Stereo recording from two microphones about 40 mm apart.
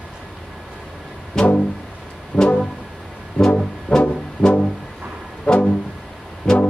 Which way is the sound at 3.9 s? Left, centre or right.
Left.